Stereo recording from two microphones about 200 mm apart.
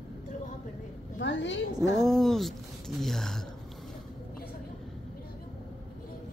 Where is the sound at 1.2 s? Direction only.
65° left (ahead or behind).